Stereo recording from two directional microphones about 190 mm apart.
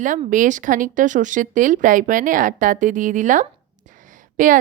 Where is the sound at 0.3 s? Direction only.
40° right (ahead or behind).